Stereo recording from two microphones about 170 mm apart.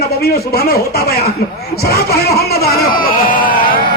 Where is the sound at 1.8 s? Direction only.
65° left (ahead or behind).